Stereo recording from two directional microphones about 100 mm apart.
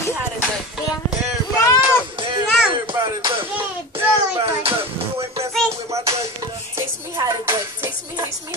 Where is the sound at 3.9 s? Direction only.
70° right (ahead or behind).